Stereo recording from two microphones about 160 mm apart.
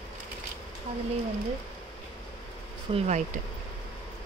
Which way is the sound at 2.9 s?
45° right (ahead or behind).